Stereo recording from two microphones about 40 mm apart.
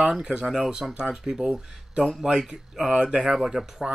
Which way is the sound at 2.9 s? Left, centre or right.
Right.